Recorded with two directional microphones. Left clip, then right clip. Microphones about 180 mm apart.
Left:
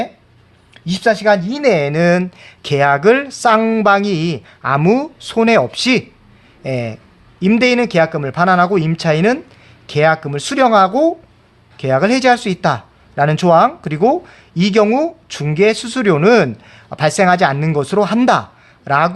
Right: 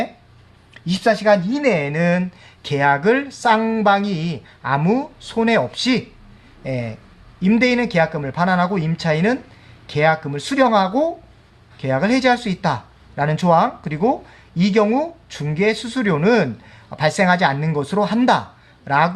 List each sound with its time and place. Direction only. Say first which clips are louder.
0.9 s speech: left 3 dB; 40° left (ahead or behind)